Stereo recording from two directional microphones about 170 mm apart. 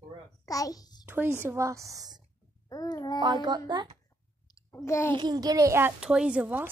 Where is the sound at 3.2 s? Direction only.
25° right (ahead or behind).